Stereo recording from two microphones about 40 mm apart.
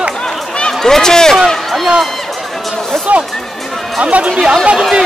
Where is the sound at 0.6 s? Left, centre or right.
Centre.